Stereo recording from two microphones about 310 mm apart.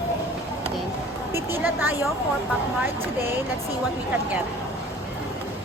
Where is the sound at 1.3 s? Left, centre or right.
Centre.